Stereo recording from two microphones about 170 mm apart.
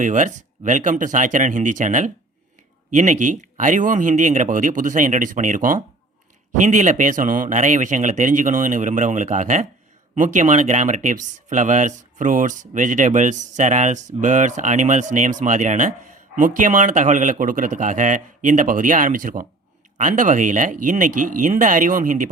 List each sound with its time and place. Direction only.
0.0 s speech: 45° right (ahead or behind)